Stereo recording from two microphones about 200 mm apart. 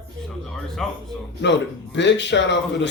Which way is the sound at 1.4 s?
60° left (ahead or behind).